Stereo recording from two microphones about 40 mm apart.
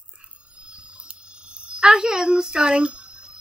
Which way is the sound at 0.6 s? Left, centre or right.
Right.